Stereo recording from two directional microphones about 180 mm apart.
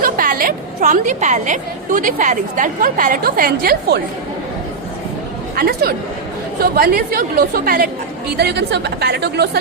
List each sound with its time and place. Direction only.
0.0 s a woman's voice: 50° right (ahead or behind)
5.5 s a woman's voice: 60° right (ahead or behind)
8.4 s a woman's voice: 65° right (ahead or behind)